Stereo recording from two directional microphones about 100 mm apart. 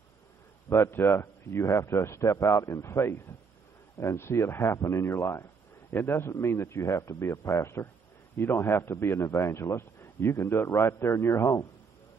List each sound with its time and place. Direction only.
0.7 s a man's voice: 25° left (ahead or behind)